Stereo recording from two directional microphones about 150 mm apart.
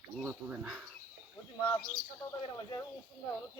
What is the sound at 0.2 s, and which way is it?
Speech, 15° right (ahead or behind).